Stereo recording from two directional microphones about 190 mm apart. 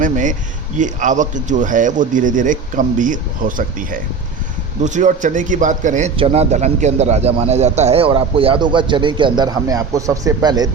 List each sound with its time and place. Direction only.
0.0 s a man's voice: 40° right (ahead or behind); by 10.7 s 20° right (ahead or behind)